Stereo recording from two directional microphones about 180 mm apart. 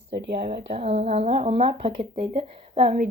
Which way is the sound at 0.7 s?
35° right (ahead or behind).